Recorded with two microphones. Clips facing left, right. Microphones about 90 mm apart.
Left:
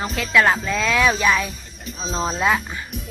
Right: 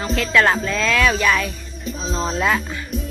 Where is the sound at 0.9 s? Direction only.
20° left (ahead or behind).